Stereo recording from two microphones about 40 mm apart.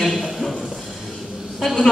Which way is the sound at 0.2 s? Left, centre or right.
Centre.